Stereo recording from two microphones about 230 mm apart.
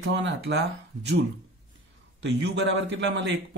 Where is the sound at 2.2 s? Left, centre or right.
Right.